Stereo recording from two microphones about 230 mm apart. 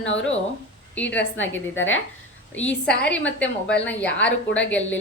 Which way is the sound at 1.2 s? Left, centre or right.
Left.